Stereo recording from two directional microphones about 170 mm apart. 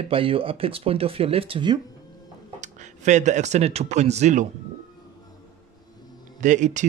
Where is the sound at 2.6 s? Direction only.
45° right (ahead or behind).